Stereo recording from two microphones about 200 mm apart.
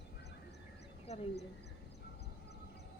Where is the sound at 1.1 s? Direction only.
35° left (ahead or behind).